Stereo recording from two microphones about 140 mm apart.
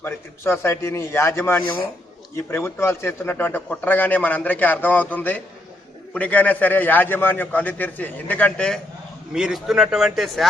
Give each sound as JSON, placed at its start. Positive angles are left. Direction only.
{"t": 0.0, "sound": "a man's voice", "side_deg": 15}